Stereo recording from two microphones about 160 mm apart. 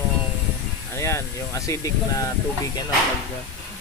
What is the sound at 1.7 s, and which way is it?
Speech, 20° left (ahead or behind).